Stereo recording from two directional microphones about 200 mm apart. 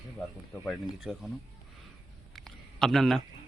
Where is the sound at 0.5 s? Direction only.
10° left (ahead or behind).